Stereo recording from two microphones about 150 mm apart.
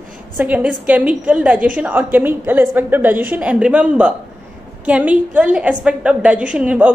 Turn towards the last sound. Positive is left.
turn(degrees=-10)  # may be behind; listen again after turning